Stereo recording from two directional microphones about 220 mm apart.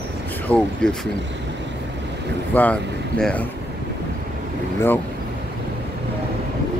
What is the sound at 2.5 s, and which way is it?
Speech, 5° left (ahead or behind).